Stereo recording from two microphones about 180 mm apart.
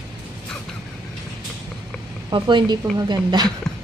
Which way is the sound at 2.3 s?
25° right (ahead or behind).